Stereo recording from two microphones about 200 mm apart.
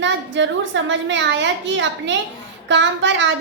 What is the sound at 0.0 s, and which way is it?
A child's voice, 65° right (ahead or behind).